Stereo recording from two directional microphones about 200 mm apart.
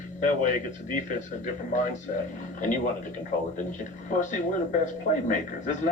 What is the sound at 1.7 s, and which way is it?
Speech, 40° left (ahead or behind).